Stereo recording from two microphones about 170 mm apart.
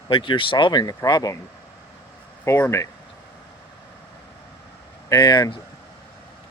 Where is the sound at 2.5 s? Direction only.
15° left (ahead or behind).